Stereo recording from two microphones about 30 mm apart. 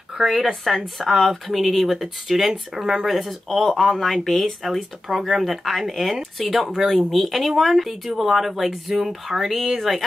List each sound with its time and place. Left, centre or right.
0.2 s speech: centre
4.6 s speech: centre